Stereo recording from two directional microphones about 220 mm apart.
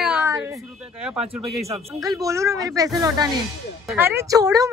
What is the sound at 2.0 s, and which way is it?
A woman's voice, 15° right (ahead or behind).